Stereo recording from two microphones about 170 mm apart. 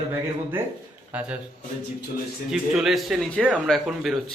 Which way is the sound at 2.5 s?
Centre (ahead or behind).